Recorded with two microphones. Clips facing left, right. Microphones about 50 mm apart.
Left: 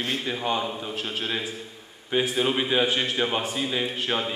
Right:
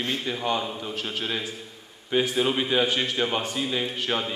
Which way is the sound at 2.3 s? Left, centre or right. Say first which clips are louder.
Even; centre.